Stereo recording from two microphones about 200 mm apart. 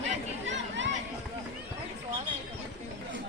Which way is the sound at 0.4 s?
65° right (ahead or behind).